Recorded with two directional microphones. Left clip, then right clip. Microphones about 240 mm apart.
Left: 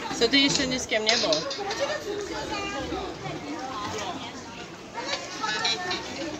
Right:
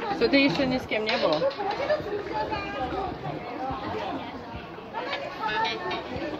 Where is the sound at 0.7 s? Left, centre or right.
Right.